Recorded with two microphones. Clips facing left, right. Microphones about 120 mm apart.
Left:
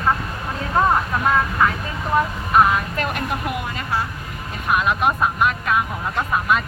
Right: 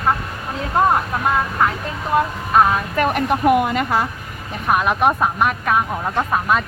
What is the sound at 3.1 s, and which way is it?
Speech, 55° right (ahead or behind).